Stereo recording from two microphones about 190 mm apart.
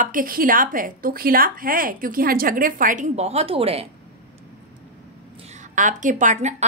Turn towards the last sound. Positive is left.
turn(degrees=-40)  # may be behind; listen again after turning